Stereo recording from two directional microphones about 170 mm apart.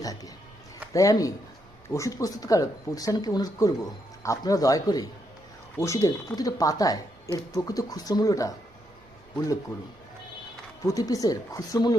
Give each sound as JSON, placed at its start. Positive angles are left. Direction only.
{"t": 0.0, "sound": "speech", "side_deg": 20}
{"t": 10.8, "sound": "speech", "side_deg": 20}